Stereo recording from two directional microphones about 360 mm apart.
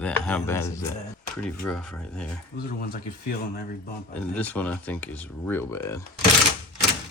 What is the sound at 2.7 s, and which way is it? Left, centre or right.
Speech, left.